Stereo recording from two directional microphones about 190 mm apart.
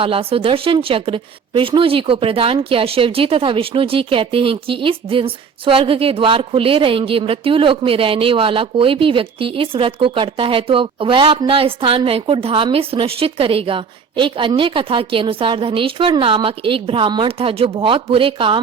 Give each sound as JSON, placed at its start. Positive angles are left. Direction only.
{"t": 0.0, "sound": "a woman's voice", "side_deg": -30}